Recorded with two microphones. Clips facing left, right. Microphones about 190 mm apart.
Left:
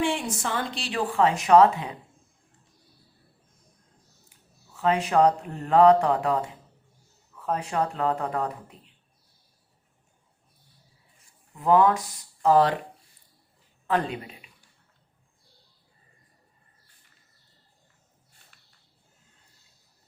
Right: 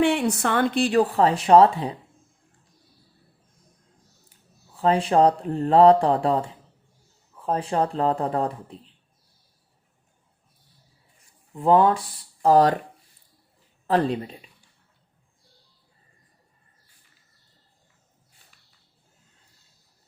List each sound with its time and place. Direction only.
0.0 s speech: 65° right (ahead or behind); by 2.0 s 35° right (ahead or behind)
4.3 s speech: 30° right (ahead or behind)
11.5 s speech: 30° right (ahead or behind)
13.8 s speech: 35° right (ahead or behind)